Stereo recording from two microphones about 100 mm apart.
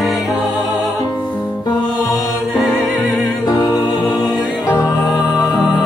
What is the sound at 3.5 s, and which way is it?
Music, 40° left (ahead or behind).